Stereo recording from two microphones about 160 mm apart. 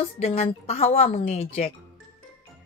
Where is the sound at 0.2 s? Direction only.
40° left (ahead or behind).